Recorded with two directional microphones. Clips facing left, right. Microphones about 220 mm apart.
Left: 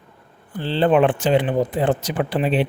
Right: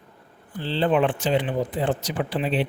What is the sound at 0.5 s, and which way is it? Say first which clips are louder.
Speech: left 5 dB; 60° left (ahead or behind).